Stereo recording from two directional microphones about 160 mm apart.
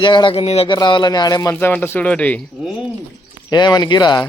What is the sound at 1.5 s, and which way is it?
Speech, 10° left (ahead or behind).